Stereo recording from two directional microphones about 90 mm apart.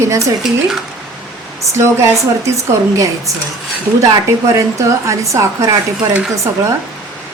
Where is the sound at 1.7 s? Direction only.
30° right (ahead or behind).